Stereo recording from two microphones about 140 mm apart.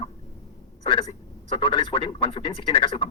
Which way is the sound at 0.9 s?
40° left (ahead or behind).